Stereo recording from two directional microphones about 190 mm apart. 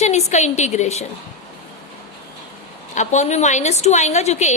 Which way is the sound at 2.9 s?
40° left (ahead or behind).